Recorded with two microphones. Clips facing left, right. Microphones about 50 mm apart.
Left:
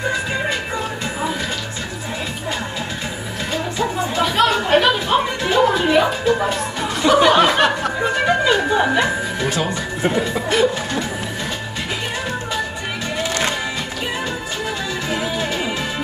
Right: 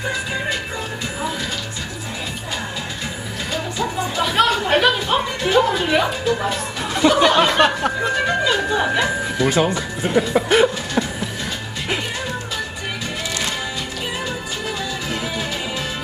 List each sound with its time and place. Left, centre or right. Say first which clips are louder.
3.5 s music: left 2 dB; centre
6.2 s speech: left 3 dB; centre
6.9 s music: left 1 dB; centre
9.7 s speech: left 2 dB; left
10.3 s chuckle: right 5 dB; right
15.1 s music: left 5 dB; centre